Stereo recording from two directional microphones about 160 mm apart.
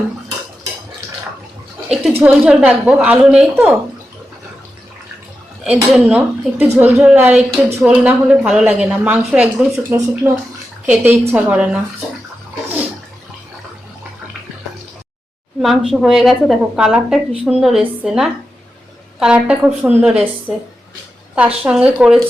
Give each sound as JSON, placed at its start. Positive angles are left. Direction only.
{"t": 1.9, "sound": "a woman's voice", "side_deg": -5}
{"t": 5.6, "sound": "a woman's voice", "side_deg": 0}
{"t": 15.9, "sound": "a woman's voice", "side_deg": 0}
{"t": 21.3, "sound": "a woman's voice", "side_deg": -5}